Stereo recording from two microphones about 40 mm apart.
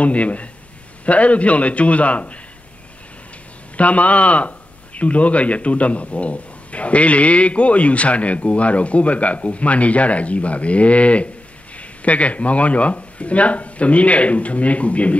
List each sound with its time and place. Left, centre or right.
0.0 s speech: left
3.7 s speech: left